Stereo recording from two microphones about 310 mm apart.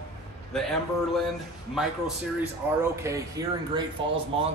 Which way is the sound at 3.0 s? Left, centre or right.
Centre.